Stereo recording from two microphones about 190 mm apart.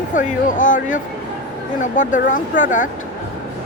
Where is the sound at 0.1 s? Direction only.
40° left (ahead or behind).